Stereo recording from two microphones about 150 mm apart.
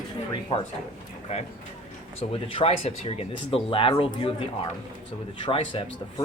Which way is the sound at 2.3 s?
35° left (ahead or behind).